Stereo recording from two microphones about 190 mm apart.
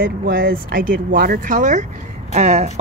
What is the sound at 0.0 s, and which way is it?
A woman's voice, 50° right (ahead or behind).